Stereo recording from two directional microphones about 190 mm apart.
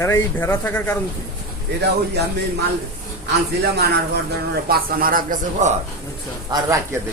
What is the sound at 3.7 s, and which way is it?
A man's voice, 60° right (ahead or behind).